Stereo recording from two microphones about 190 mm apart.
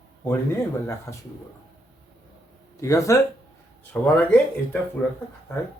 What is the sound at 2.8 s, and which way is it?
Speech, 15° left (ahead or behind).